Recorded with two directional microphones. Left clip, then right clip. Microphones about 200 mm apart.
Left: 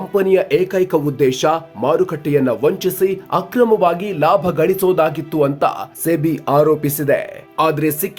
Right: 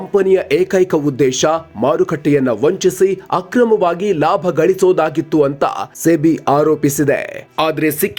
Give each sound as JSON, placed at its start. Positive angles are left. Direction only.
{"t": 0.1, "sound": "speech", "side_deg": -15}